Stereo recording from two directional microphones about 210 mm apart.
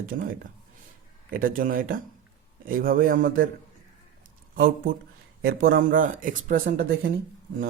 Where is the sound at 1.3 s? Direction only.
40° right (ahead or behind).